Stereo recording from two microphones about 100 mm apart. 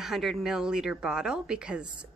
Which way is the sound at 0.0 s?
5° right (ahead or behind).